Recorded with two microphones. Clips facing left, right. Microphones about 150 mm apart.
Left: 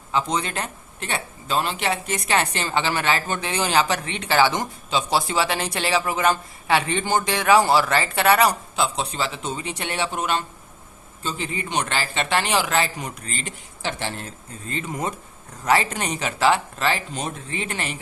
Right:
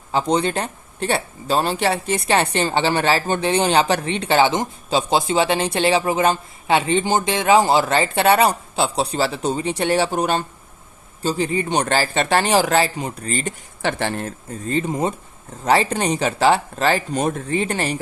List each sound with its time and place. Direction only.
0.1 s speech: 35° right (ahead or behind)
4.9 s speech: 35° right (ahead or behind)
5.1 s speech: 25° right (ahead or behind); by 13.5 s 40° right (ahead or behind)
13.8 s speech: 55° right (ahead or behind)
14.8 s speech: 30° right (ahead or behind)